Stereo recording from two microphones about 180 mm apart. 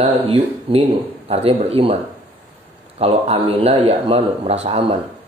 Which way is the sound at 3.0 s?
35° right (ahead or behind).